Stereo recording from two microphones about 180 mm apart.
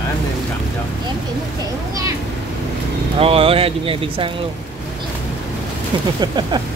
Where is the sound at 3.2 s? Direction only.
30° right (ahead or behind).